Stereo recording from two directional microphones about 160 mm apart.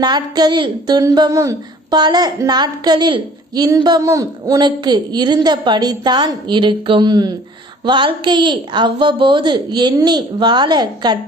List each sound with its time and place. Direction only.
0.0 s speech: 25° right (ahead or behind)